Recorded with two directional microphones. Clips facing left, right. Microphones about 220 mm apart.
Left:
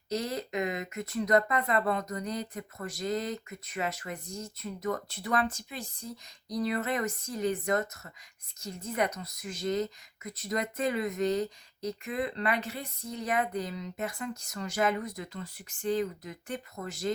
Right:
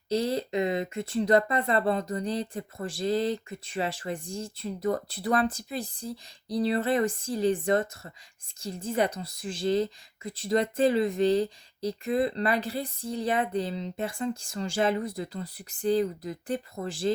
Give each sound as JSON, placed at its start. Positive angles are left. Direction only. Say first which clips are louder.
{"t": 0.1, "sound": "a woman's voice", "louder": "right 6 dB", "side_deg": -30}